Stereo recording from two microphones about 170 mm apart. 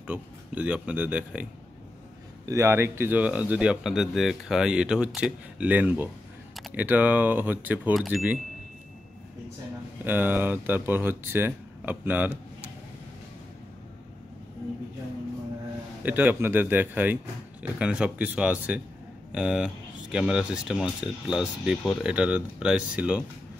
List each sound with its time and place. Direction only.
0.0 s speech: 10° right (ahead or behind)
10.0 s speech: 10° right (ahead or behind)
16.0 s speech: 10° right (ahead or behind)